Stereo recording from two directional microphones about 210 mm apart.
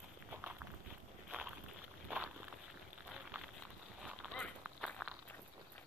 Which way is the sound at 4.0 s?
Centre (ahead or behind).